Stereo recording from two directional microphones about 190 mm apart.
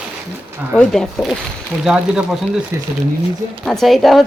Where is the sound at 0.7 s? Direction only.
Centre (ahead or behind).